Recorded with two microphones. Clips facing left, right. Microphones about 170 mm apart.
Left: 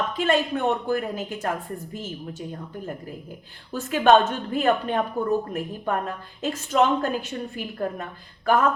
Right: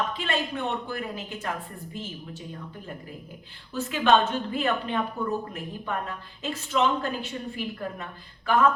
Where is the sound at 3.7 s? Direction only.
50° left (ahead or behind).